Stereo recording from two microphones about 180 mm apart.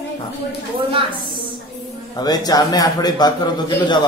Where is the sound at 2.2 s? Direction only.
20° left (ahead or behind).